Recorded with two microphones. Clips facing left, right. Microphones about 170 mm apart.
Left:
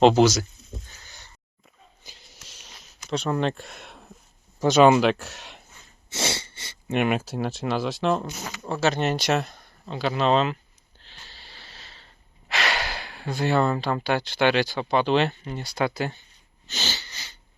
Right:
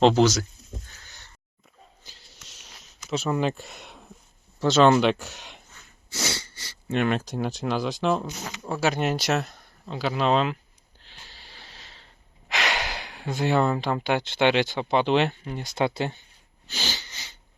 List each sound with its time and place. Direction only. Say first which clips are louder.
0.0 s speech: left 2 dB; 10° left (ahead or behind)
2.0 s a sound: left 2 dB; 15° left (ahead or behind)
2.4 s a sound: left 1 dB; centre (ahead or behind)
3.1 s speech: even; 5° right (ahead or behind)
4.6 s speech: left 2 dB; 15° left (ahead or behind)
6.1 s speech: left 2 dB; 25° left (ahead or behind); by 10.6 s 5° right (ahead or behind)
11.0 s a sound: left 1 dB; 15° right (ahead or behind)
12.5 s speech: left 1 dB; 15° right (ahead or behind)
16.6 s sniff: even; 10° right (ahead or behind)